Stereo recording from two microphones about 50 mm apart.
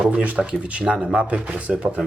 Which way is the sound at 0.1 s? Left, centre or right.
Right.